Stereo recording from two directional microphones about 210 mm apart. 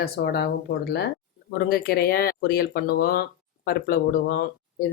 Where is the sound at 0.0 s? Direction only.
50° left (ahead or behind).